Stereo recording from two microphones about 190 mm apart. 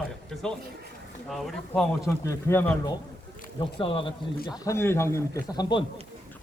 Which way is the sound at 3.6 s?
30° left (ahead or behind).